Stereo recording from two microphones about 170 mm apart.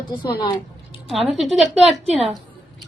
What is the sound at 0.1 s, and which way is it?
Speech, 25° left (ahead or behind).